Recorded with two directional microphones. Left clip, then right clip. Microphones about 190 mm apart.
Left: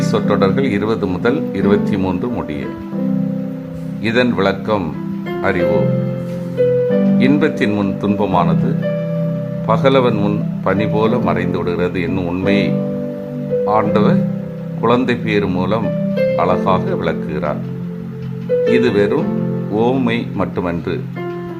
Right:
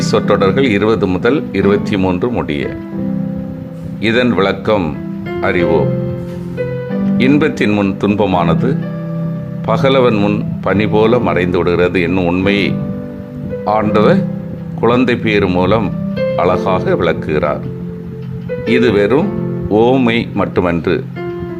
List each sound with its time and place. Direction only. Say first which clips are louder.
0.1 s speech: right 4 dB; 20° right (ahead or behind)
4.0 s speech: right 3 dB; 20° right (ahead or behind)
7.2 s speech: right 2 dB; 20° right (ahead or behind)
18.7 s speech: right 6 dB; 25° right (ahead or behind)